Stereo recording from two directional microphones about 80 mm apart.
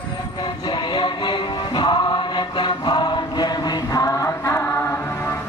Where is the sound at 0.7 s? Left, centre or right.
Left.